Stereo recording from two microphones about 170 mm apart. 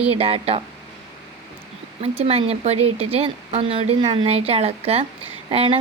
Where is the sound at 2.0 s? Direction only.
35° right (ahead or behind).